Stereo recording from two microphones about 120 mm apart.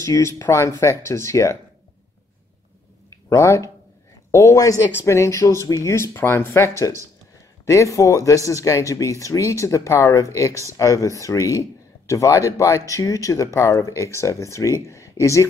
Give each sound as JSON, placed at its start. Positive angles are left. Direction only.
{"t": 0.0, "sound": "speech", "side_deg": 25}
{"t": 3.3, "sound": "speech", "side_deg": 25}